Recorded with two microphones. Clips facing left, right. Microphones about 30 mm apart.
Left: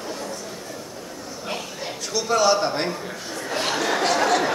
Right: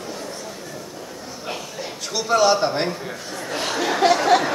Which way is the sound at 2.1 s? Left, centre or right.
Centre.